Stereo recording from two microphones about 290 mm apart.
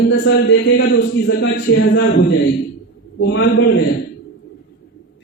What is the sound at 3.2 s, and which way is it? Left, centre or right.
Speech, left.